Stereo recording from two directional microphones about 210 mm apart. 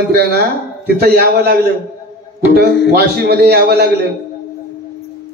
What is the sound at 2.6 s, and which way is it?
A man's voice, 50° right (ahead or behind).